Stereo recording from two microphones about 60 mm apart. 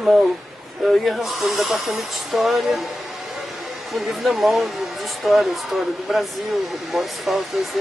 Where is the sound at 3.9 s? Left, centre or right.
Centre.